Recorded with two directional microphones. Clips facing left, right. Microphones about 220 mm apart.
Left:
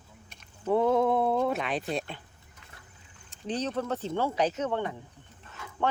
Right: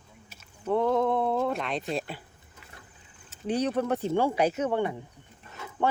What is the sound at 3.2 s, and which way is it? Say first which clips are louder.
Speech: right 4 dB; 10° right (ahead or behind).